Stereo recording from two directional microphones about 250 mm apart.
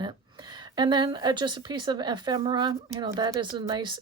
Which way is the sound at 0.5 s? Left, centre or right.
Centre.